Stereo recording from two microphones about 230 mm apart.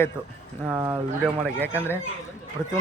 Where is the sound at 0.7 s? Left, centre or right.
Centre.